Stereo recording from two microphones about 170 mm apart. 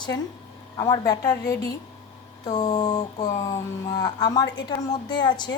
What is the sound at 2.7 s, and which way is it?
A woman's voice, 20° left (ahead or behind).